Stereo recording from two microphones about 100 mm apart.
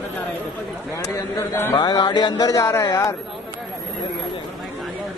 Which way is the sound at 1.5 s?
25° left (ahead or behind).